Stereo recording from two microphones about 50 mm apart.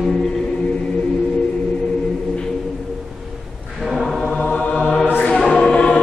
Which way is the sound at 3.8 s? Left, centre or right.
Centre.